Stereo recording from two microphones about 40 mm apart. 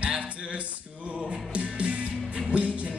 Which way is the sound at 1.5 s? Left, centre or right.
Right.